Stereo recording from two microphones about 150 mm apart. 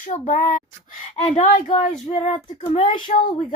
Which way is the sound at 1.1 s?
45° left (ahead or behind).